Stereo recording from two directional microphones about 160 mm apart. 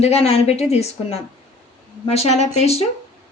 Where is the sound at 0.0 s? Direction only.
40° left (ahead or behind).